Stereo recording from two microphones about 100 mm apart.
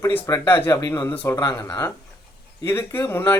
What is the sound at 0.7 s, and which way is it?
Speech, 40° left (ahead or behind).